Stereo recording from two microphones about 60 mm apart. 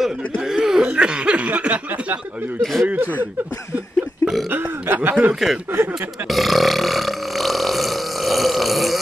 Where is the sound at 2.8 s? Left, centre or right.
Right.